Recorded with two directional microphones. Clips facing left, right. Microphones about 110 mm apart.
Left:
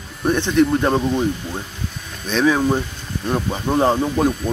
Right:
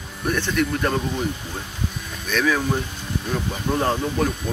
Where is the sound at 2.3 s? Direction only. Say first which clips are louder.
Left 5 dB; 25° left (ahead or behind).